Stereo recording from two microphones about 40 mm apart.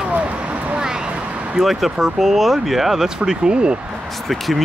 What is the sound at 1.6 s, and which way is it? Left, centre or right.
Speech, centre.